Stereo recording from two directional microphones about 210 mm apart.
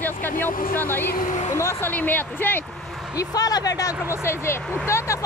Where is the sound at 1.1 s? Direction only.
35° left (ahead or behind).